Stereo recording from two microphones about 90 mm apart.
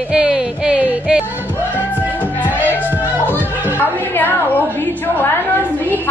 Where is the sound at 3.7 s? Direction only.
20° left (ahead or behind).